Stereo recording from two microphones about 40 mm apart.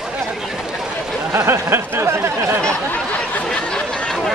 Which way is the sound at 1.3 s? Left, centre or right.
Right.